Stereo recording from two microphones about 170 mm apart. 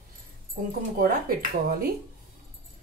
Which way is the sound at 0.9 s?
60° right (ahead or behind).